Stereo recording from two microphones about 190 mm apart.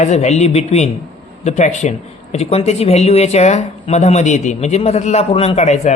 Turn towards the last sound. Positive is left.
turn(degrees=35)  # may be behind; listen again after turning